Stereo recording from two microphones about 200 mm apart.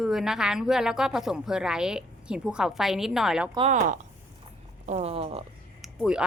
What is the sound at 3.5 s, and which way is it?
Speech, 35° right (ahead or behind).